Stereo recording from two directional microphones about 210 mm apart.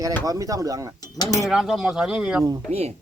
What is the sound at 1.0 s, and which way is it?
Cutlery, 20° left (ahead or behind).